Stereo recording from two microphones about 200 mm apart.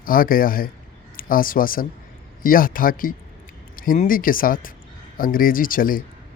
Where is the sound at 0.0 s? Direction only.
45° left (ahead or behind).